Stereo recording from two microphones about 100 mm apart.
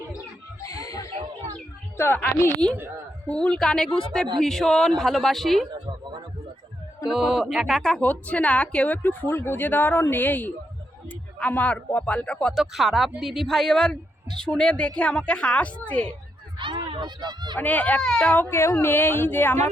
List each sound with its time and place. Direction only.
0.2 s bird: 35° left (ahead or behind)
2.0 s a woman's voice: 20° left (ahead or behind); by 5.6 s centre (ahead or behind)
5.7 s a sound: 45° right (ahead or behind)
7.1 s speech: 5° right (ahead or behind)
7.8 s a woman's voice: 5° left (ahead or behind)
12.5 s a woman's voice: centre (ahead or behind)
16.6 s speech: 55° right (ahead or behind)
17.6 s a woman's voice: 15° left (ahead or behind)
18.4 s speech: 25° left (ahead or behind)